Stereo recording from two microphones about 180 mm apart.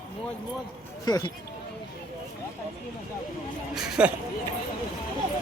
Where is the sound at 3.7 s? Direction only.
5° right (ahead or behind).